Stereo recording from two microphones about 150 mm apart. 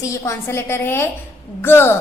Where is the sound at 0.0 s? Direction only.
20° left (ahead or behind).